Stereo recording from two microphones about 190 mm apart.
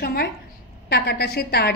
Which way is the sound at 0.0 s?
55° left (ahead or behind).